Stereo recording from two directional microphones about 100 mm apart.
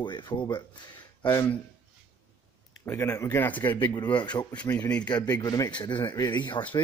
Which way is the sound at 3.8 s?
50° left (ahead or behind).